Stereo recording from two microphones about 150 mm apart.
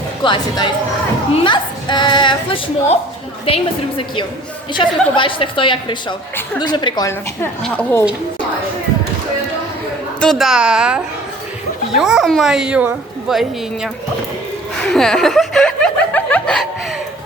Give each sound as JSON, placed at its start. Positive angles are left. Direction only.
{"t": 0.2, "sound": "a woman's voice", "side_deg": 30}
{"t": 7.6, "sound": "a woman's voice", "side_deg": 10}
{"t": 10.2, "sound": "speech", "side_deg": 0}
{"t": 14.8, "sound": "chuckle", "side_deg": 5}